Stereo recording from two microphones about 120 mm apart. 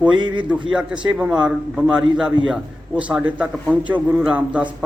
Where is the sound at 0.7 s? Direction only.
10° right (ahead or behind).